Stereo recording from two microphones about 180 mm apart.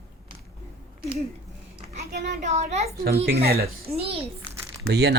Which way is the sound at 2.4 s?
40° right (ahead or behind).